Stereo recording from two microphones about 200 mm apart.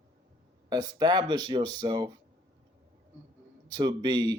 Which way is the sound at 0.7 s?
20° right (ahead or behind).